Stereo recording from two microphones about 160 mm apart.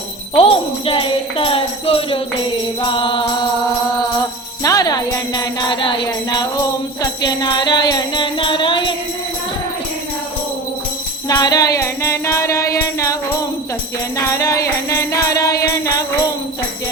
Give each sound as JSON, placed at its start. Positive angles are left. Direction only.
{"t": 0.3, "sound": "jingle bell", "side_deg": 35}
{"t": 4.6, "sound": "jingle bell", "side_deg": 20}
{"t": 7.0, "sound": "music", "side_deg": 25}
{"t": 11.3, "sound": "music", "side_deg": 25}
{"t": 14.2, "sound": "music", "side_deg": 20}